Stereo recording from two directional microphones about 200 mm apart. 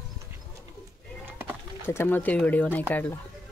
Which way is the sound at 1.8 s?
10° left (ahead or behind).